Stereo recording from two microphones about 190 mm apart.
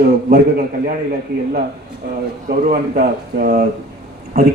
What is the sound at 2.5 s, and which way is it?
A man's voice, 45° right (ahead or behind).